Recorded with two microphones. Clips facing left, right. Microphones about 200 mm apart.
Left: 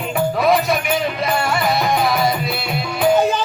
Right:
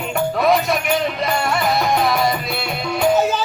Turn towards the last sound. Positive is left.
turn(degrees=0)  # may be behind; listen again after turning